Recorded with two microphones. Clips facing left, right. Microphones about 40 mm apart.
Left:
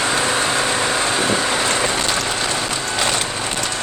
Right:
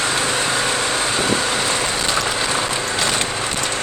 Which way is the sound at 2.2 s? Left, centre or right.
Centre.